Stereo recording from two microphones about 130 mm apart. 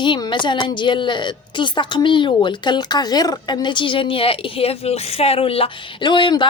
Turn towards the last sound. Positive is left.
turn(degrees=35)  # may be behind; listen again after turning